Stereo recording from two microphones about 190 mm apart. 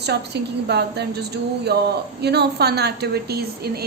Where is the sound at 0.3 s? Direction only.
60° right (ahead or behind).